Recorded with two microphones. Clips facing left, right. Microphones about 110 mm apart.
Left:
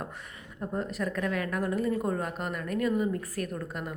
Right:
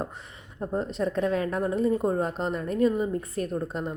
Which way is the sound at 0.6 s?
25° right (ahead or behind).